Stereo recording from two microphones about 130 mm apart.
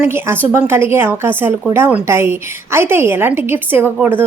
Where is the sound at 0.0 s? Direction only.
20° right (ahead or behind).